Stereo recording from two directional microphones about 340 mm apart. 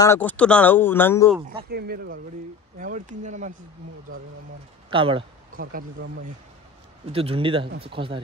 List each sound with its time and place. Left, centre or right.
0.0 s speech: centre
1.7 s speech: right
4.8 s speech: centre
7.1 s a man's voice: centre